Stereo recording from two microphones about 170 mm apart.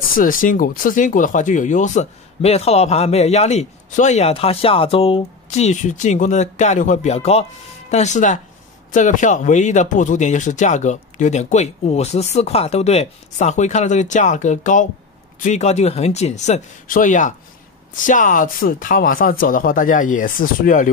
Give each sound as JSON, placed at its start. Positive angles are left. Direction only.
{"t": 0.1, "sound": "speech", "side_deg": 55}